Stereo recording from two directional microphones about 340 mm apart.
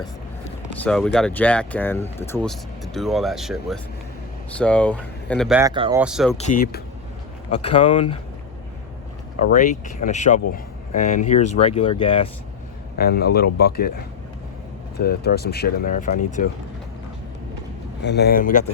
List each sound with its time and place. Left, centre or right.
0.8 s speech: centre
6.0 s speech: centre
6.3 s speech: left
9.5 s speech: left
13.0 s speech: left
18.0 s speech: left